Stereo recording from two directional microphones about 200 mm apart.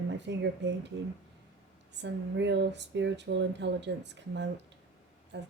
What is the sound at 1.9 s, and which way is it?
Speech, 60° right (ahead or behind).